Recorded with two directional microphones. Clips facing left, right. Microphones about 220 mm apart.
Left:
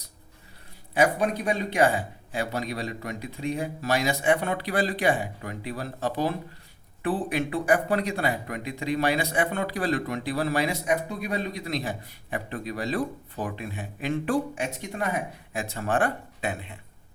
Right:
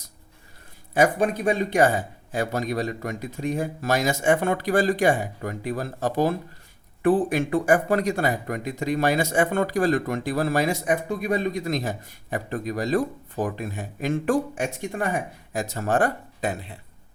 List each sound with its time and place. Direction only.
0.9 s a man's voice: 45° right (ahead or behind)